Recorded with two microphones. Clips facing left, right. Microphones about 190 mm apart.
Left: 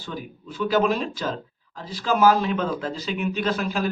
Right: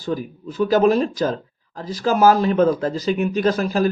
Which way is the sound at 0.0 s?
40° right (ahead or behind).